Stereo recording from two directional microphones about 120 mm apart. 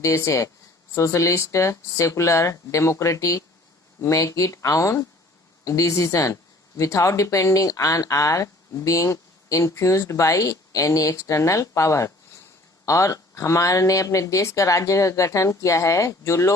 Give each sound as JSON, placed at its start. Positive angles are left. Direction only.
{"t": 0.0, "sound": "speech", "side_deg": 20}